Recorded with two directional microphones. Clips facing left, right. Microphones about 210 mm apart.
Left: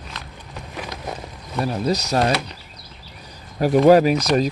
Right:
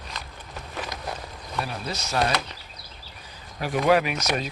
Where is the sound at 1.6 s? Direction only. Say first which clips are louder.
Left 10 dB; 40° left (ahead or behind).